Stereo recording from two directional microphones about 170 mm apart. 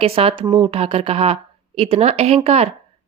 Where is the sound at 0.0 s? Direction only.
35° right (ahead or behind).